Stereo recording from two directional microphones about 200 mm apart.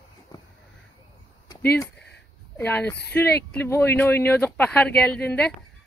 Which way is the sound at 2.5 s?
10° left (ahead or behind).